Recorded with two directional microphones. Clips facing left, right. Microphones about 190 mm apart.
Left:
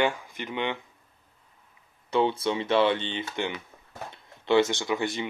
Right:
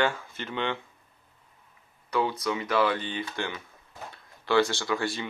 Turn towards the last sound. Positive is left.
turn(degrees=20)  # may be behind; listen again after turning